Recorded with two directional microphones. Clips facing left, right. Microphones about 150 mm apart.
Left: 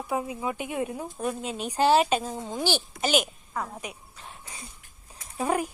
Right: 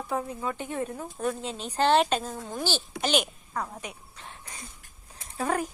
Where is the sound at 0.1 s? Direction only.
10° left (ahead or behind).